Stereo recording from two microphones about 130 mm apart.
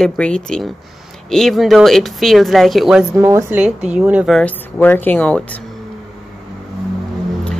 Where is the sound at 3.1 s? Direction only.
25° right (ahead or behind).